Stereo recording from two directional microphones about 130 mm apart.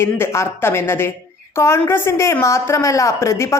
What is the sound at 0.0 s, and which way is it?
A woman's voice, 20° left (ahead or behind).